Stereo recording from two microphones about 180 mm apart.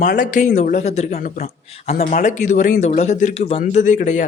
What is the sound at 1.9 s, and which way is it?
Speech, 50° left (ahead or behind).